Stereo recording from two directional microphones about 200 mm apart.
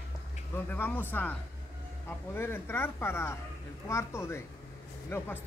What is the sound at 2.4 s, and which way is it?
Speech, 10° left (ahead or behind).